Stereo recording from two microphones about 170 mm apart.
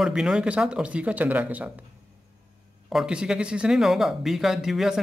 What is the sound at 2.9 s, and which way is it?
Speech, 5° right (ahead or behind).